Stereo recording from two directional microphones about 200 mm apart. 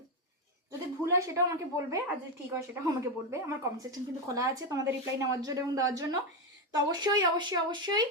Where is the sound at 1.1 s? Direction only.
15° right (ahead or behind).